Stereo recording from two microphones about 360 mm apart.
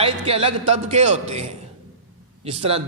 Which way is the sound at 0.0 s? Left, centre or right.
Centre.